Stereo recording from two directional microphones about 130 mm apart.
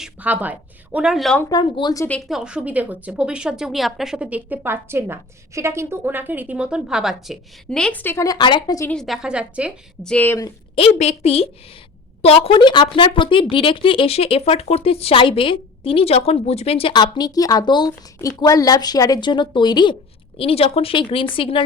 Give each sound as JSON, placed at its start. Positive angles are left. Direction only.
{"t": 0.0, "sound": "speech", "side_deg": -10}
{"t": 1.5, "sound": "speech", "side_deg": 35}
{"t": 2.0, "sound": "speech", "side_deg": 10}
{"t": 2.3, "sound": "a woman's voice", "side_deg": -5}
{"t": 8.9, "sound": "a woman's voice", "side_deg": 0}
{"t": 10.0, "sound": "speech", "side_deg": 10}
{"t": 10.9, "sound": "speech", "side_deg": 55}
{"t": 20.4, "sound": "speech", "side_deg": 50}